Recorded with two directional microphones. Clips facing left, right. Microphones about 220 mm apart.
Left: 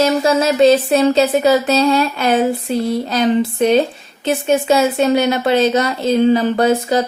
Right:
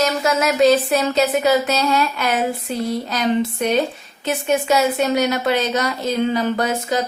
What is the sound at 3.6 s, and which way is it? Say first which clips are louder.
Speech: left 6 dB; 30° left (ahead or behind).